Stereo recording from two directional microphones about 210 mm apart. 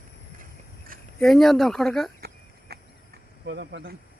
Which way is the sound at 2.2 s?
50° right (ahead or behind).